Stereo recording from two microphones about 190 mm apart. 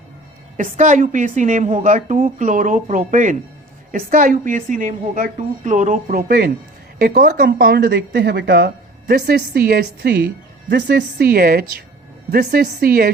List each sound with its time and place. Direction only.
0.5 s a woman's voice: 40° right (ahead or behind)